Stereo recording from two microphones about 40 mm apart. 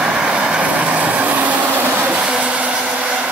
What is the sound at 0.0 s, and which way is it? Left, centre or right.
Vehicle, centre.